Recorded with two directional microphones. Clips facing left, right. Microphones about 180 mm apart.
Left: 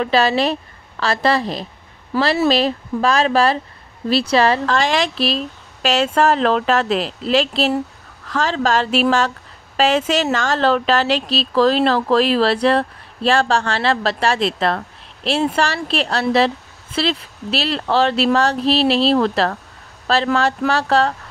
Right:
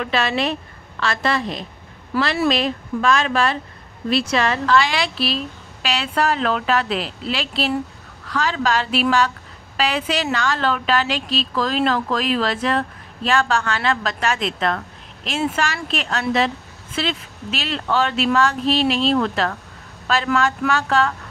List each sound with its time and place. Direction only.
0.0 s a woman's voice: 35° left (ahead or behind)